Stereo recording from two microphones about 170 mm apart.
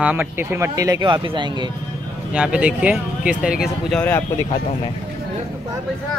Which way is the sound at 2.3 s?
5° right (ahead or behind).